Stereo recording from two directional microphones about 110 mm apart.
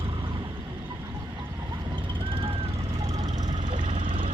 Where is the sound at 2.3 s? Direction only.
55° right (ahead or behind).